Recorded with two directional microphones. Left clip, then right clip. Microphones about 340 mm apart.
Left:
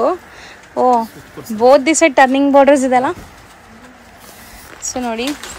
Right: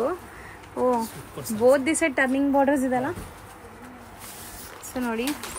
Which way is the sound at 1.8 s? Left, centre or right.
Left.